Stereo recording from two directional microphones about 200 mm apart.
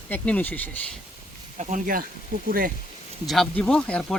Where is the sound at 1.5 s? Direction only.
40° right (ahead or behind).